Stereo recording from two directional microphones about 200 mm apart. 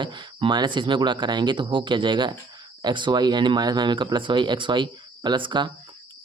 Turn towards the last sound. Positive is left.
turn(degrees=-25)  # may be behind; listen again after turning